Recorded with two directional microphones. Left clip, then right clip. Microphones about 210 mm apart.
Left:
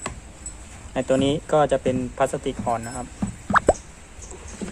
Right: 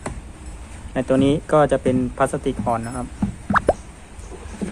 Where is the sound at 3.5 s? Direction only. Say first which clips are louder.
Even; centre (ahead or behind).